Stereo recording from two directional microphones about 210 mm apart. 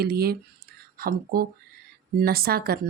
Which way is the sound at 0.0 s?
50° right (ahead or behind).